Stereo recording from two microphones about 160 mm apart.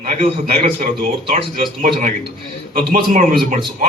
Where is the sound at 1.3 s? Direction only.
60° right (ahead or behind).